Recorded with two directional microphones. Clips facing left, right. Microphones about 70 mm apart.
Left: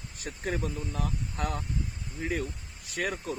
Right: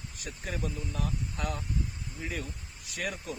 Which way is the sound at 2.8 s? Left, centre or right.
Left.